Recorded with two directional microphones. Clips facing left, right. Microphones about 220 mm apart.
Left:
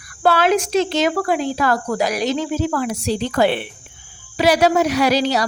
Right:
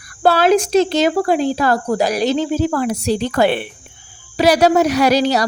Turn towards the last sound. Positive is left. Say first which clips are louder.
# right 3 dB
turn(degrees=-45)  # may be behind; listen again after turning